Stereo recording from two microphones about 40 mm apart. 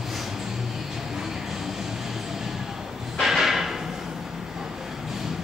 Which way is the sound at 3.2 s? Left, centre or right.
Centre.